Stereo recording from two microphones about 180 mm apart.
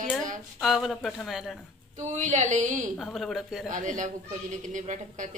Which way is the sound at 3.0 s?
Centre (ahead or behind).